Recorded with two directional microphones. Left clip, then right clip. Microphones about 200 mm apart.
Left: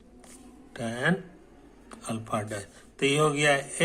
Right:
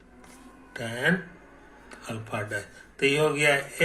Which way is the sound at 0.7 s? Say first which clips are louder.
Right 2 dB; 25° left (ahead or behind).